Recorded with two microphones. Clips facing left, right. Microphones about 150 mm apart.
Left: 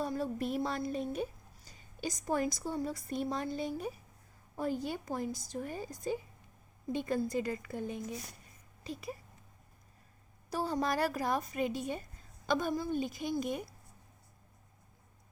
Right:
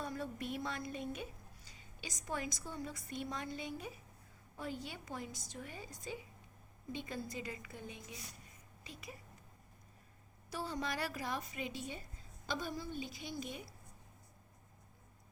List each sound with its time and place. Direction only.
0.0 s a woman's voice: 35° left (ahead or behind)
6.9 s a woman's voice: 50° left (ahead or behind)
10.5 s a woman's voice: 40° left (ahead or behind)